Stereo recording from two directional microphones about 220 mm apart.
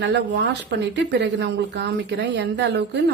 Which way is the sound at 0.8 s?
50° right (ahead or behind).